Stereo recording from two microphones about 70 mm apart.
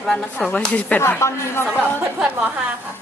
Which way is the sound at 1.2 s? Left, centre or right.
Left.